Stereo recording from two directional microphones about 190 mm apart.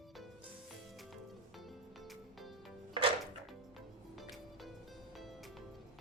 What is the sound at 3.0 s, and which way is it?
Music, 25° right (ahead or behind).